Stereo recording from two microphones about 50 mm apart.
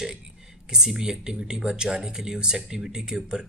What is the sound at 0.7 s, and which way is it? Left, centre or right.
Speech, centre.